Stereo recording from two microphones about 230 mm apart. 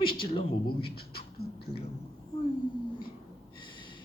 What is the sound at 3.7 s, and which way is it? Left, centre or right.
Snort, left.